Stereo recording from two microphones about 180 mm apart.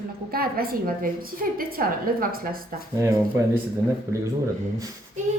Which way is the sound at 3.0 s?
15° right (ahead or behind).